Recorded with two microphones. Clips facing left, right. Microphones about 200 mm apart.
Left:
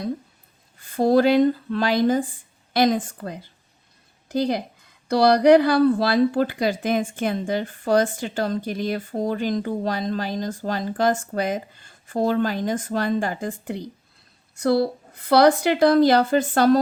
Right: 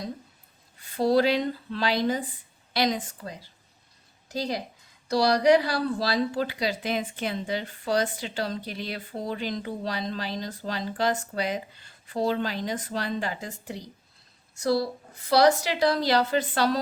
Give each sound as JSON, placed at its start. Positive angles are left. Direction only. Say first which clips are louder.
{"t": 0.8, "sound": "speech", "louder": "left 4 dB", "side_deg": 50}